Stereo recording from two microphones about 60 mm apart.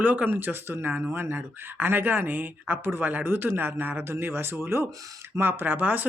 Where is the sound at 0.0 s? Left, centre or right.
Right.